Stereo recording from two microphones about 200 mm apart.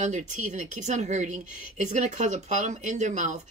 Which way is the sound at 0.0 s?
40° right (ahead or behind).